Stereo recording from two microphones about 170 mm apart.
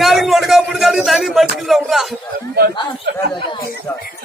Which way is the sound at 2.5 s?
70° right (ahead or behind).